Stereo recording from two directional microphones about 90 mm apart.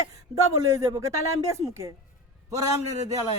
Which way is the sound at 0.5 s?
35° right (ahead or behind).